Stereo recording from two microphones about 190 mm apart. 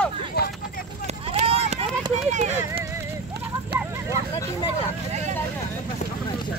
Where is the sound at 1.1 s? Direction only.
35° right (ahead or behind).